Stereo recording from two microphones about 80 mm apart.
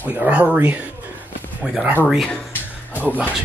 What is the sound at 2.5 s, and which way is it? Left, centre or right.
Music, left.